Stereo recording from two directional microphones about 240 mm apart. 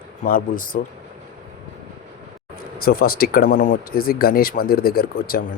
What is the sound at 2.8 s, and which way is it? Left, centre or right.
Speech, left.